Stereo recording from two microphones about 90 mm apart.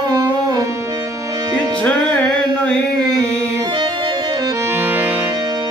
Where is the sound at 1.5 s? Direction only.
15° left (ahead or behind).